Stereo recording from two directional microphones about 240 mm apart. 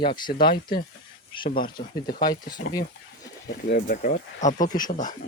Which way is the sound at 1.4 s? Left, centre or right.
Left.